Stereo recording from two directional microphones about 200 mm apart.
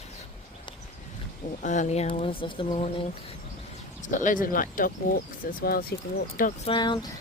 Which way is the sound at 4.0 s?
40° left (ahead or behind).